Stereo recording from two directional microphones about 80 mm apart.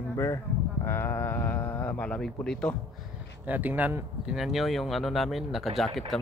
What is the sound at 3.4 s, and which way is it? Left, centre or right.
Speech, right.